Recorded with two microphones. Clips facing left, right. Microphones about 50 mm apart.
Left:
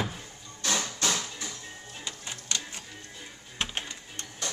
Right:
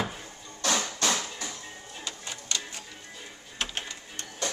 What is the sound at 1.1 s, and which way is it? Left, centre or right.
Music, right.